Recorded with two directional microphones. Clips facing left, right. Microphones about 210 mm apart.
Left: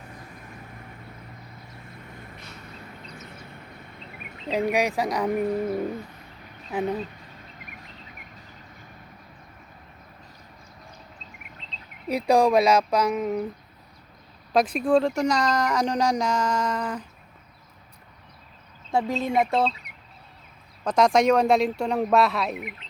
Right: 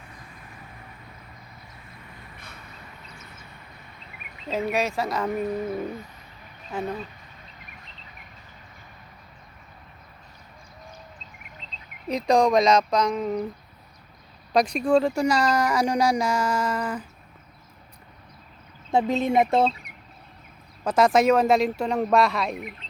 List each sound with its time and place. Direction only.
4.5 s speech: 15° left (ahead or behind)
6.7 s speech: 15° left (ahead or behind)
12.3 s speech: 5° left (ahead or behind)
14.5 s speech: 5° left (ahead or behind)
18.9 s speech: 20° right (ahead or behind)
20.8 s speech: 5° right (ahead or behind)